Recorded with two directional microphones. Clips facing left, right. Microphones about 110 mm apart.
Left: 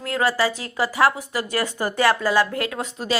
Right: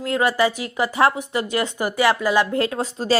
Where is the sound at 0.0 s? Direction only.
20° right (ahead or behind).